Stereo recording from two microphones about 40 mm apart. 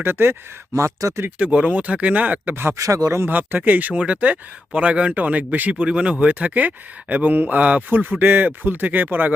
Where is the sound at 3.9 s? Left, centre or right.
Right.